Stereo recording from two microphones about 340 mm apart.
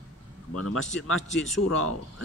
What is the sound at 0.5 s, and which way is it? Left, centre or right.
Speech, left.